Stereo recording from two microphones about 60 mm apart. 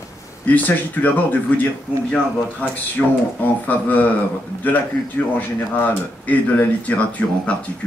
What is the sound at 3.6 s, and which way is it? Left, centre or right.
Speech, left.